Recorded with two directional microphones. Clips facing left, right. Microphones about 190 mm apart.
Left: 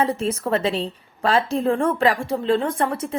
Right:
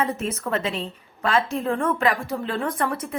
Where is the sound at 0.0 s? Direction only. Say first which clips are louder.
Left 4 dB; 30° left (ahead or behind).